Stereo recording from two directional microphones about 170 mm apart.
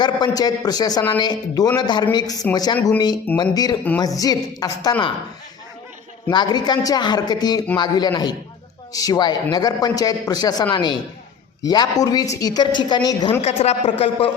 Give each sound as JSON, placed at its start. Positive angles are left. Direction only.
{"t": 0.0, "sound": "a man's voice", "side_deg": 25}
{"t": 6.3, "sound": "a man's voice", "side_deg": 25}
{"t": 13.4, "sound": "speech", "side_deg": 35}